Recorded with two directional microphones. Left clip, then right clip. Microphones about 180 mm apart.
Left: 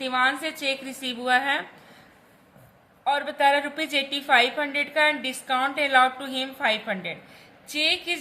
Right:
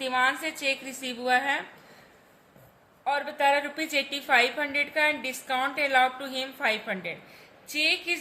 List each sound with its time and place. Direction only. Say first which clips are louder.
0.0 s a woman's voice: left 2 dB; 10° left (ahead or behind)
3.0 s a woman's voice: left 4 dB; 5° left (ahead or behind)